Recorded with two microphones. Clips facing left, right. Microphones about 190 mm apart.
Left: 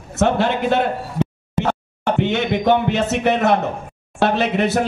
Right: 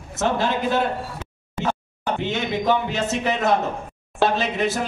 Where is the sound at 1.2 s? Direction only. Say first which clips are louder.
Left 17 dB; 70° left (ahead or behind).